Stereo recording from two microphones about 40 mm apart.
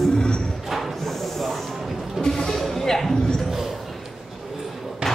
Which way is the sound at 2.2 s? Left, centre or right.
Centre.